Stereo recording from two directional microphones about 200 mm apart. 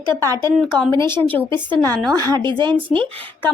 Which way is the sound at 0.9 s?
15° left (ahead or behind).